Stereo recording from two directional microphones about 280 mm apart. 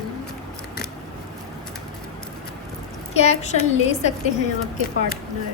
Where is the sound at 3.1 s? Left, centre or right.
Left.